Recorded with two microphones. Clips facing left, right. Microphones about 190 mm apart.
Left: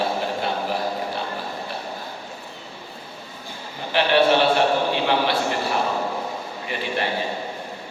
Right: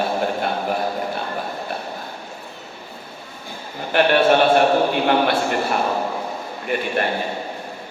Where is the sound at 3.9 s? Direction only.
50° right (ahead or behind).